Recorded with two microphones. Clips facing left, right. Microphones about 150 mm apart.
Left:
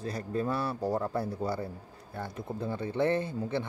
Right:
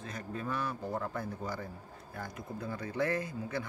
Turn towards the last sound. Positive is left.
turn(degrees=25)  # may be behind; listen again after turning